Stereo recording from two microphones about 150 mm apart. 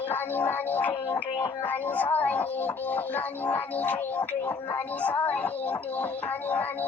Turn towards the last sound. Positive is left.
turn(degrees=10)  # may be behind; listen again after turning